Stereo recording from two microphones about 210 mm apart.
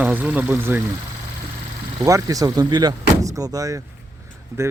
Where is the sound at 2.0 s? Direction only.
15° right (ahead or behind).